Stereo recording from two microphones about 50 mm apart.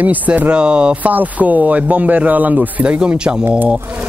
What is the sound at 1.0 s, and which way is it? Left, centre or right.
Speech, right.